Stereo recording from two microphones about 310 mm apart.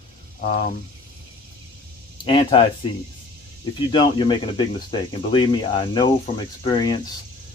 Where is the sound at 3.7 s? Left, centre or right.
Centre.